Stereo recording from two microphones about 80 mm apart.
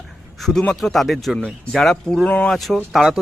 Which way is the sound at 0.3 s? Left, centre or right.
Centre.